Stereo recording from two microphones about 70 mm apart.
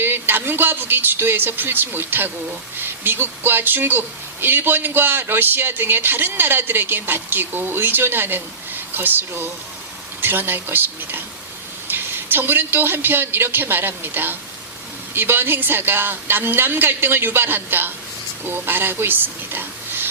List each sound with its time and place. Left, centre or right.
0.0 s a man's voice: right